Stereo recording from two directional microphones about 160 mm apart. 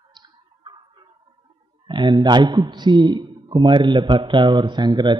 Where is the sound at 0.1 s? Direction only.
30° right (ahead or behind).